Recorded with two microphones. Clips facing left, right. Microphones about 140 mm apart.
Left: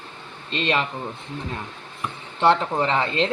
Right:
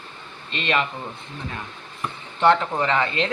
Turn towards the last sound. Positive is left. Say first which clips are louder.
# left 1 dB
turn(degrees=30)  # may be behind; listen again after turning